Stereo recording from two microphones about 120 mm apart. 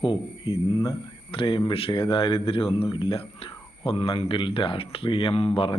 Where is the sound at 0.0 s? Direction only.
50° left (ahead or behind).